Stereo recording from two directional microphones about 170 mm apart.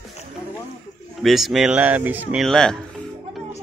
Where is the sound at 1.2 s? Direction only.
Centre (ahead or behind).